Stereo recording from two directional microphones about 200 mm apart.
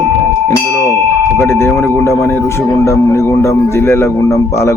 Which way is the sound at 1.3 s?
15° left (ahead or behind).